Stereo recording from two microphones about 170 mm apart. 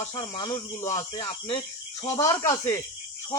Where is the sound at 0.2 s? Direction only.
25° left (ahead or behind).